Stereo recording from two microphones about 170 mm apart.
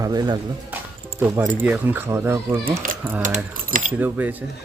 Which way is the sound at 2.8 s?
50° right (ahead or behind).